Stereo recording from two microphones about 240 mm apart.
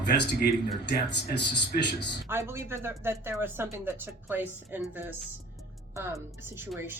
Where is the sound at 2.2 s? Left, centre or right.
Centre.